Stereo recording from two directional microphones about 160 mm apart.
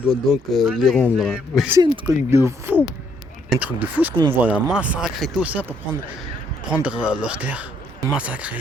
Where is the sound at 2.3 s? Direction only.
15° right (ahead or behind).